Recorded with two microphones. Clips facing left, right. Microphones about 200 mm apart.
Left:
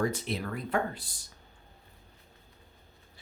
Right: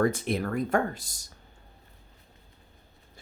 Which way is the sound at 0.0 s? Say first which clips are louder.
Right 5 dB; 50° right (ahead or behind).